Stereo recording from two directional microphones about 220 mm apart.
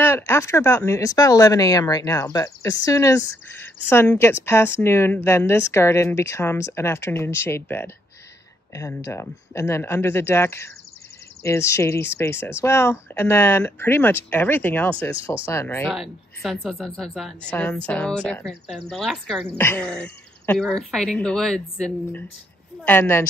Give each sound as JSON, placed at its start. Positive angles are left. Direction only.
{"t": 0.0, "sound": "speech", "side_deg": 10}
{"t": 15.9, "sound": "speech", "side_deg": 0}